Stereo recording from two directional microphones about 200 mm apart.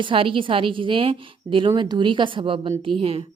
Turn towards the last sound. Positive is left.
turn(degrees=-30)  # may be behind; listen again after turning